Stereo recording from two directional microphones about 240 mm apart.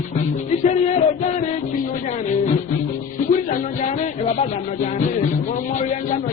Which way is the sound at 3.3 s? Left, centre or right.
Left.